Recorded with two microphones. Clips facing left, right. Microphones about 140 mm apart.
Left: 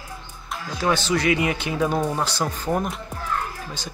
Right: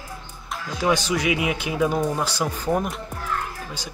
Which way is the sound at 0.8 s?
10° right (ahead or behind).